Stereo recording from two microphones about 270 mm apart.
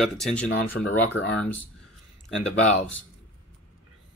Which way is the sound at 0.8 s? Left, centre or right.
Left.